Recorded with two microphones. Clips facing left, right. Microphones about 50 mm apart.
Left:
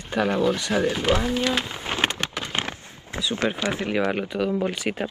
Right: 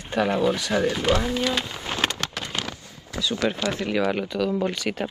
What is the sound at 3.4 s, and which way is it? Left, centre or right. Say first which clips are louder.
Speech: even; left.